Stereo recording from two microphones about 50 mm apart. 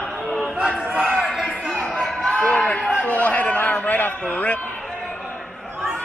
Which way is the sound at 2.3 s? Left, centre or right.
Left.